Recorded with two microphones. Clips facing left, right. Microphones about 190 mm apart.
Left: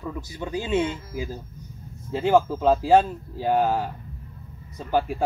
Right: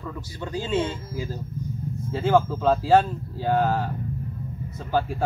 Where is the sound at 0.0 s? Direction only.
15° left (ahead or behind).